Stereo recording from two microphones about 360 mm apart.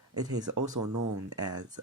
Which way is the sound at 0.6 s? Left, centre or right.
Right.